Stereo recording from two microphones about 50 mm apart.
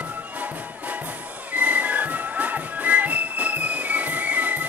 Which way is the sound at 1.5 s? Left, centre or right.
Right.